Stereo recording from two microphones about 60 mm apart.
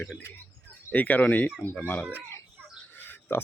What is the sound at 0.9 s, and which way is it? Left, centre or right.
Speech, left.